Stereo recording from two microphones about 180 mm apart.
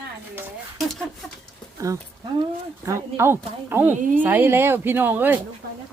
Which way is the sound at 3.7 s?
10° right (ahead or behind).